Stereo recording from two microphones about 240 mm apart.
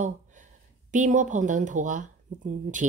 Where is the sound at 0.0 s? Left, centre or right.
Right.